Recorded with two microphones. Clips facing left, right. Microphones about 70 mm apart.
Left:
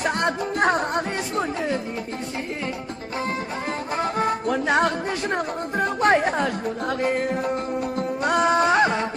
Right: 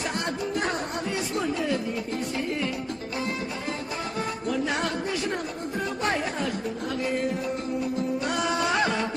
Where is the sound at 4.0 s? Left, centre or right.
Left.